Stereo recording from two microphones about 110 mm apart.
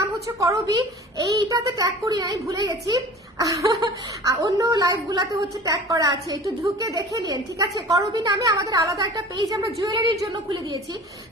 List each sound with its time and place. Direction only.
0.0 s a woman's voice: 30° right (ahead or behind)